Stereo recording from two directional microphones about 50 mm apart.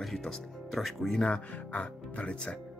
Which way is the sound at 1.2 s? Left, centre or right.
Left.